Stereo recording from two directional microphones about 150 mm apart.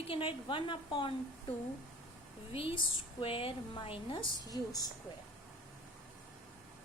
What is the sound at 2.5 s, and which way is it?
A woman's voice, 40° left (ahead or behind).